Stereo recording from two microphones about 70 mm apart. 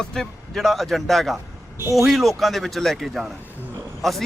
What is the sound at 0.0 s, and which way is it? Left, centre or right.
Speech, centre.